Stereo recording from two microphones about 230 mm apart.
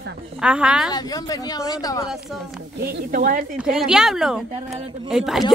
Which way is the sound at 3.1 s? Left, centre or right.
Right.